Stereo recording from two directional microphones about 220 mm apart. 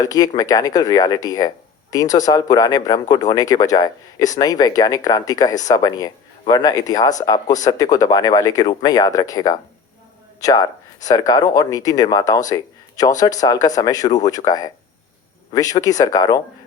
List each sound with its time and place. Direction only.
0.0 s speech: 15° left (ahead or behind)